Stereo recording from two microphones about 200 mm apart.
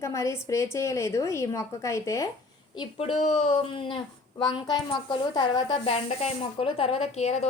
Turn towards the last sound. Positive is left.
turn(degrees=30)  # may be behind; listen again after turning